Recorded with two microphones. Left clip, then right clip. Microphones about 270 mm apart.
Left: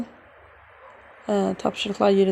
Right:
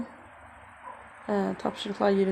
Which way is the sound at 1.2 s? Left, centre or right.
Left.